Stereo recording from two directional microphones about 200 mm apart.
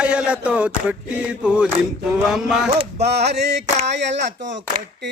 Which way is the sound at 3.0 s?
55° right (ahead or behind).